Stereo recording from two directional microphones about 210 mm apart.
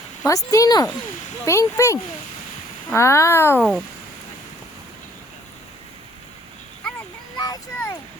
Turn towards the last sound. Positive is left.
turn(degrees=15)  # may be behind; listen again after turning